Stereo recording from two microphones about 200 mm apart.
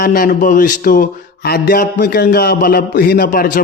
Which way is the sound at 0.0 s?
45° left (ahead or behind).